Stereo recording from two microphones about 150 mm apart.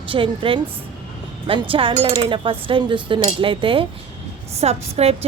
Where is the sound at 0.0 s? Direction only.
35° right (ahead or behind).